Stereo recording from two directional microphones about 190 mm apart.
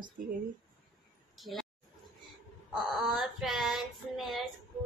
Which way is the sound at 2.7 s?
Centre (ahead or behind).